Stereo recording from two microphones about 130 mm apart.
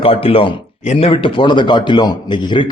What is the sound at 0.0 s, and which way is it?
A man's voice, 45° left (ahead or behind).